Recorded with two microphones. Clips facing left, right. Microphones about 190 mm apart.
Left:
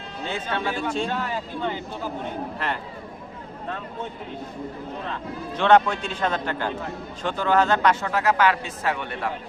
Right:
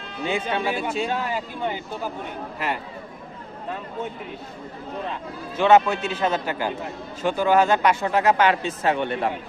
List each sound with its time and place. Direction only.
0.3 s speech: 15° right (ahead or behind)
5.5 s speech: 5° right (ahead or behind); by 9.3 s 25° right (ahead or behind)